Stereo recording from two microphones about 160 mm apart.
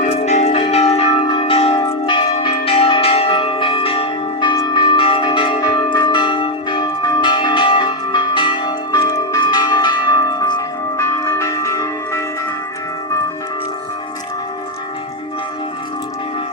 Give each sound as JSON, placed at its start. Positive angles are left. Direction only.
{"t": 0.0, "sound": "church bell", "side_deg": 45}